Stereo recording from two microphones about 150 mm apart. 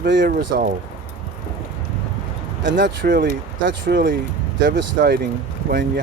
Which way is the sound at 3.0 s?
85° right.